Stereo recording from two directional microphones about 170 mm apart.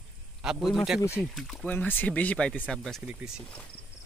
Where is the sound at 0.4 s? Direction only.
5° right (ahead or behind).